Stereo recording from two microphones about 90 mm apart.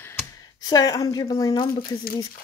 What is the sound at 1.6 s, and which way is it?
Speech, 55° left (ahead or behind).